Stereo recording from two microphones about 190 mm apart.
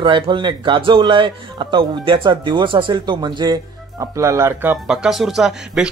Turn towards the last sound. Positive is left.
turn(degrees=-5)  # may be behind; listen again after turning